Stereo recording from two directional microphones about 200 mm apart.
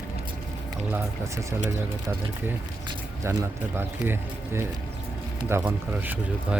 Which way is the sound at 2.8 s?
15° right (ahead or behind).